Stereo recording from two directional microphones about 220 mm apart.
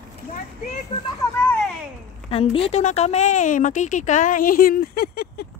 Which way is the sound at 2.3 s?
25° left (ahead or behind).